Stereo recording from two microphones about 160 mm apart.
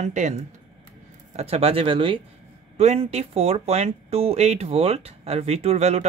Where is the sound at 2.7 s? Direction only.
40° right (ahead or behind).